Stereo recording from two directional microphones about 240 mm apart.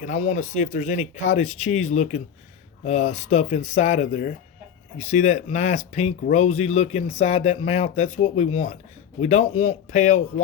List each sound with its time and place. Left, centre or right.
0.0 s speech: left